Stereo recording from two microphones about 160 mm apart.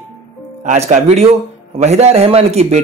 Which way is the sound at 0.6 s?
45° right (ahead or behind).